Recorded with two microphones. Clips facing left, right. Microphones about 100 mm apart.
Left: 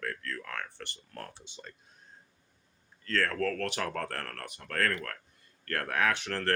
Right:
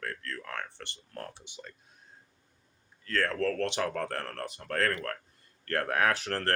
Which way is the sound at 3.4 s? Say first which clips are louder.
Right 2 dB; 30° right (ahead or behind).